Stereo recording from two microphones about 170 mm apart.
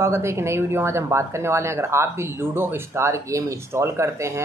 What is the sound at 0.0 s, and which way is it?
Speech, 15° right (ahead or behind).